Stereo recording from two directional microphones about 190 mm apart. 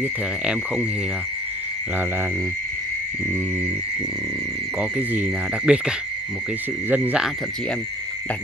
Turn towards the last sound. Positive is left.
turn(degrees=-5)  # may be behind; listen again after turning